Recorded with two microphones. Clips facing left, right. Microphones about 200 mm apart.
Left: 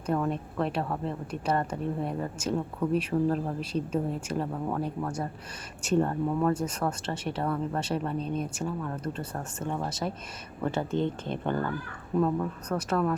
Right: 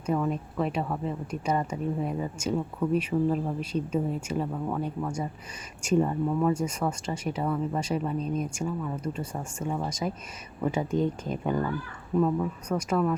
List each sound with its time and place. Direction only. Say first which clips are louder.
0.0 s speech: right 1 dB; 5° right (ahead or behind)
8.2 s speech: right 1 dB; 30° left (ahead or behind)
8.6 s speech: right 1 dB; 5° right (ahead or behind)